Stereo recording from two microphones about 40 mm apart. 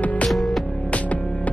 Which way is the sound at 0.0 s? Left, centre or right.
Left.